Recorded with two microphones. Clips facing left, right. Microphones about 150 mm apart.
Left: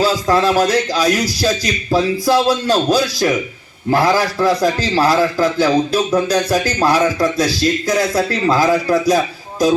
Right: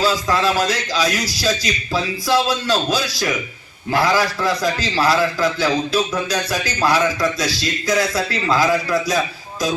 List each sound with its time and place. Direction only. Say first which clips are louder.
0.0 s a man's voice: left 4 dB; 45° left (ahead or behind)